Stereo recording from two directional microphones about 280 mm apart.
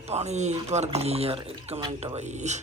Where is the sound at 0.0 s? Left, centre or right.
Right.